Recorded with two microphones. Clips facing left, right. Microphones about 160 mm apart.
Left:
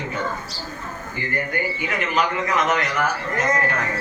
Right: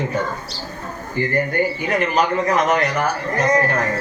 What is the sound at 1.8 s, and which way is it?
A man's voice, 40° right (ahead or behind).